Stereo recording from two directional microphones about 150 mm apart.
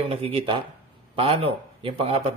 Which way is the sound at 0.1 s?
40° right (ahead or behind).